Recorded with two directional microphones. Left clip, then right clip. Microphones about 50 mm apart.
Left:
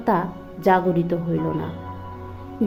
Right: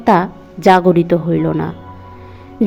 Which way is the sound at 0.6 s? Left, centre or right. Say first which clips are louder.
Right 9 dB; right.